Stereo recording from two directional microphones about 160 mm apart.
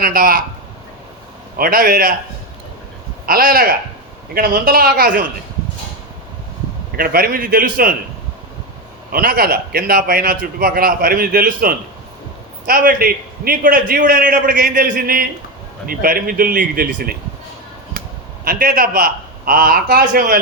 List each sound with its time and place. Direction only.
0.0 s a man's voice: 65° right (ahead or behind)
1.5 s a man's voice: 65° right (ahead or behind)
3.2 s a man's voice: 65° right (ahead or behind)
6.9 s a man's voice: 70° right (ahead or behind)
9.1 s a man's voice: 70° right (ahead or behind)
18.4 s a man's voice: 60° right (ahead or behind)